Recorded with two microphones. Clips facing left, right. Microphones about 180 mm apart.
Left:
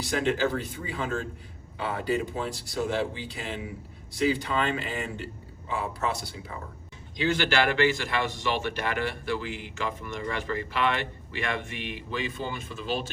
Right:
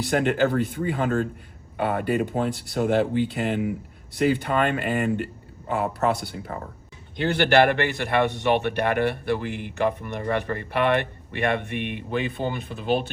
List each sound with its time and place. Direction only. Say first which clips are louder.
0.0 s a man's voice: right 5 dB; 60° right (ahead or behind)